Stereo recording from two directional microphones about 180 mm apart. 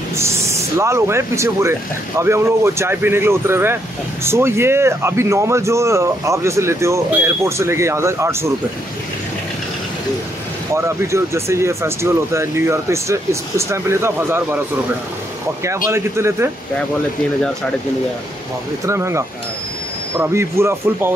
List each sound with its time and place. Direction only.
0.2 s speech: 15° right (ahead or behind)
10.7 s speech: 15° right (ahead or behind)
15.6 s speech: 15° right (ahead or behind)
18.9 s speech: 15° right (ahead or behind)